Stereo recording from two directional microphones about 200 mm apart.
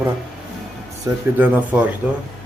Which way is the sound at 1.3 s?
10° right (ahead or behind).